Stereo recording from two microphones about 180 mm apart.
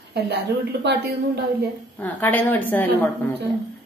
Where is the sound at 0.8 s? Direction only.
65° right (ahead or behind).